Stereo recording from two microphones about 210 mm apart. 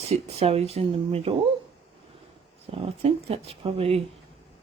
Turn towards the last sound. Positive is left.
turn(degrees=-30)  # may be behind; listen again after turning